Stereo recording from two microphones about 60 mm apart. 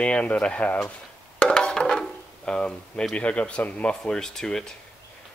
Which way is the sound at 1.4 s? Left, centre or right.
Centre.